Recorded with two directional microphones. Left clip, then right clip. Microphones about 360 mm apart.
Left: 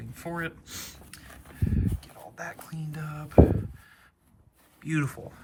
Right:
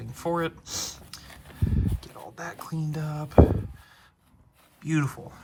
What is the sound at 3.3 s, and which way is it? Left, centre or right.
Speech, left.